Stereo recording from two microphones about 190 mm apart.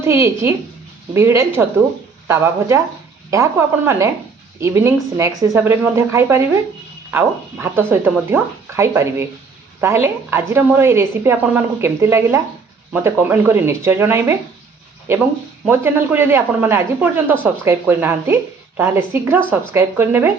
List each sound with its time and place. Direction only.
0.0 s a woman's voice: 15° right (ahead or behind)
15.6 s a woman's voice: 10° right (ahead or behind)